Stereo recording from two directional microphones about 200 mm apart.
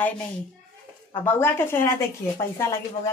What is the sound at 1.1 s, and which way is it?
A woman's voice, 10° left (ahead or behind).